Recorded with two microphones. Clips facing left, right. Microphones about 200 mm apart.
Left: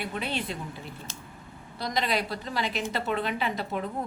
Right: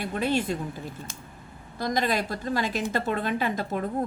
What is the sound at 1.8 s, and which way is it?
A woman's voice, 50° right (ahead or behind).